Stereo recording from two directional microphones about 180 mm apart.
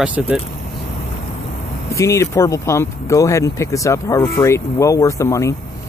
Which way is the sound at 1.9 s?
15° left (ahead or behind).